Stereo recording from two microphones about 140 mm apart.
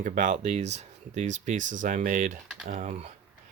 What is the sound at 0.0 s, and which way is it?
Speech, 65° right (ahead or behind).